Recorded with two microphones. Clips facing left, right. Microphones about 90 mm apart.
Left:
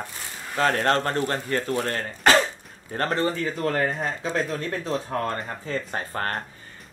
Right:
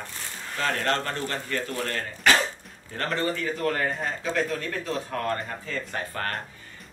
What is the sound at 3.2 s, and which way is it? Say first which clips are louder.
A man's voice: left 2 dB; 30° left (ahead or behind).